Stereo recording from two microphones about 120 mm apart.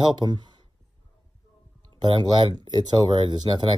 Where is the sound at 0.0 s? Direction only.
40° right (ahead or behind).